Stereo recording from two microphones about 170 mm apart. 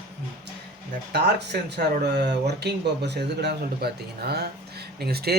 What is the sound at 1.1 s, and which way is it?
Speech, 75° right (ahead or behind).